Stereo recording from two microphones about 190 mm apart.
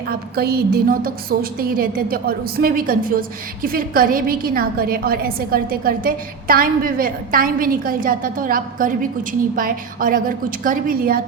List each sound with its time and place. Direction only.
0.3 s a woman's voice: 55° right (ahead or behind)